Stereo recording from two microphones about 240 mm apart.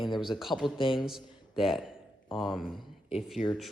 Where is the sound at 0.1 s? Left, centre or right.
Centre.